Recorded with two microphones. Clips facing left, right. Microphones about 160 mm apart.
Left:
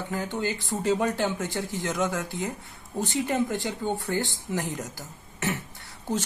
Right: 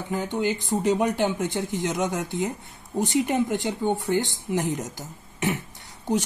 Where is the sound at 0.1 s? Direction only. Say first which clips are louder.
Right 5 dB; 20° right (ahead or behind).